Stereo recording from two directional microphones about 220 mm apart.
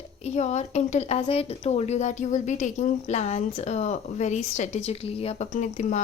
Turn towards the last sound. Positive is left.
turn(degrees=35)  # may be behind; listen again after turning